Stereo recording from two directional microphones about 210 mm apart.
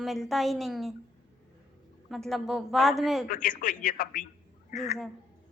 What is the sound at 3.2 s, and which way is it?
Speech, 40° left (ahead or behind).